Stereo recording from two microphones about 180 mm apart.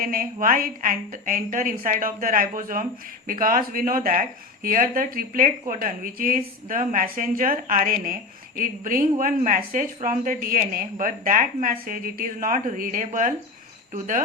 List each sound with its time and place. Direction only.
0.0 s speech: 50° right (ahead or behind)